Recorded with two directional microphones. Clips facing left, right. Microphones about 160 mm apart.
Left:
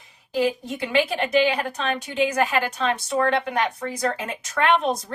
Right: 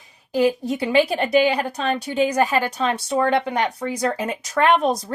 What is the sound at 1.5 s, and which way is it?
Speech, 35° right (ahead or behind).